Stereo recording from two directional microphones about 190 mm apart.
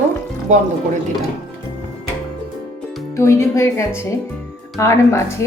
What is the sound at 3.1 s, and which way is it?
Speech, 15° left (ahead or behind).